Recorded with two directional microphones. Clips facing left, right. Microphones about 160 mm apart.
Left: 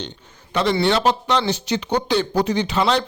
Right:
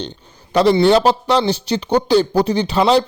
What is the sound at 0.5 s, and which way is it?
A man's voice, 35° right (ahead or behind).